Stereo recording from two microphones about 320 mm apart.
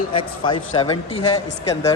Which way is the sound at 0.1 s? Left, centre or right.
Centre.